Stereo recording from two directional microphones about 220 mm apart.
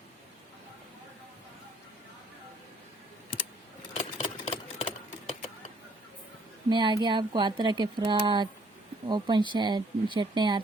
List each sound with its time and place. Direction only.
3.9 s engine: 25° left (ahead or behind)
6.7 s speech: 20° right (ahead or behind)